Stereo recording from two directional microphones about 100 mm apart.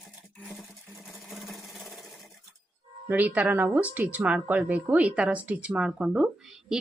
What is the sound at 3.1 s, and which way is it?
Speech, 15° right (ahead or behind).